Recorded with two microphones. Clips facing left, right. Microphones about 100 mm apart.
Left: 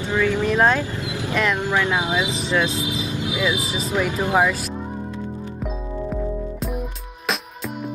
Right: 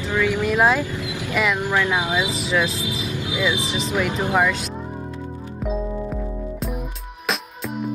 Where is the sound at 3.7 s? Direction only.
40° left (ahead or behind).